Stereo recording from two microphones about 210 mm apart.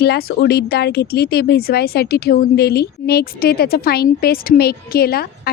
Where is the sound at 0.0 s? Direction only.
50° left (ahead or behind).